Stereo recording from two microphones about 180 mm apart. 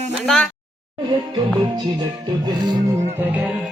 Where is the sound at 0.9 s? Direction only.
25° right (ahead or behind).